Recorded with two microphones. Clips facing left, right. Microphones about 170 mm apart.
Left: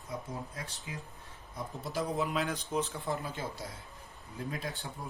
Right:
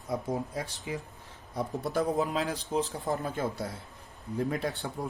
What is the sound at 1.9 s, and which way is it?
A man's voice, 40° right (ahead or behind).